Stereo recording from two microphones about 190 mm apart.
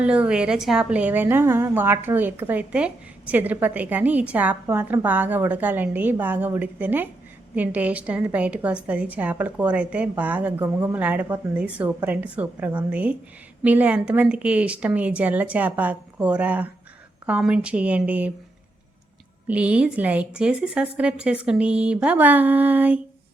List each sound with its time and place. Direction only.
0.0 s a woman's voice: 5° right (ahead or behind)
19.5 s a woman's voice: 5° right (ahead or behind)